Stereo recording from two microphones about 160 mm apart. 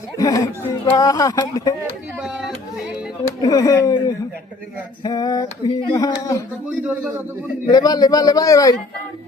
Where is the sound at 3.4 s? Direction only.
25° left (ahead or behind).